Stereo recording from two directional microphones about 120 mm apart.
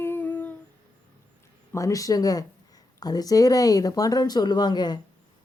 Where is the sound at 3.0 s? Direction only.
30° left (ahead or behind).